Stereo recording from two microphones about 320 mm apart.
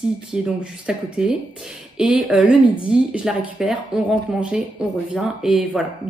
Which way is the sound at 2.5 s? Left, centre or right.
Centre.